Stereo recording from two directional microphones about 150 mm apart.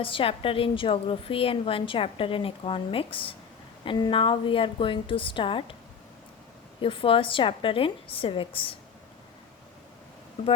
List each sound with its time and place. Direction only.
0.0 s a woman's voice: 35° left (ahead or behind)
6.8 s a woman's voice: 35° left (ahead or behind)